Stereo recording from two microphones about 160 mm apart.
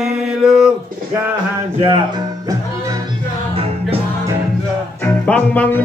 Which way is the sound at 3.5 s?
35° right (ahead or behind).